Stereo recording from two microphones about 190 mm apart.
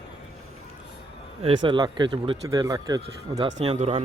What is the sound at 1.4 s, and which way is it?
A man's voice, 25° right (ahead or behind).